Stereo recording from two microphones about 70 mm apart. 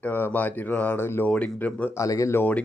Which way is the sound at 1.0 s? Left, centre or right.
Left.